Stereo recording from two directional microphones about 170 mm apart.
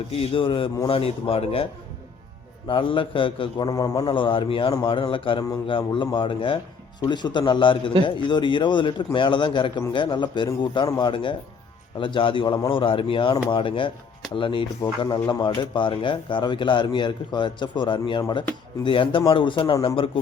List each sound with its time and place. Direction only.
0.1 s speech: 35° left (ahead or behind)
2.6 s a man's voice: 30° left (ahead or behind)